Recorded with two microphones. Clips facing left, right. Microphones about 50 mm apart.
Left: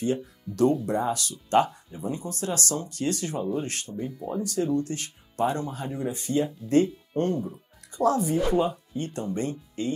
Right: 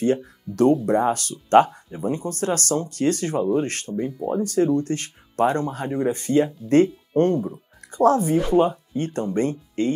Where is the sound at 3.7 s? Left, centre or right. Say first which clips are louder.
Right 6 dB; right.